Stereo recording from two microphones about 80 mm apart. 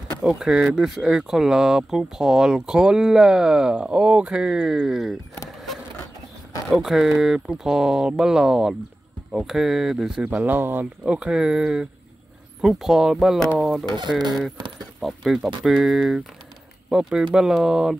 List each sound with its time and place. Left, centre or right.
0.2 s speech: centre
6.7 s speech: centre
10.3 s speech: right
11.1 s speech: centre
15.0 s speech: centre